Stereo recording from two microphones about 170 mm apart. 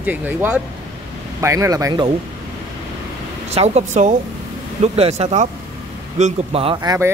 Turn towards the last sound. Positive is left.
turn(degrees=-20)  # may be behind; listen again after turning